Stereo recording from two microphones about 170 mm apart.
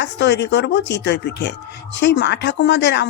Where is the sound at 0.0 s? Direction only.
90° left.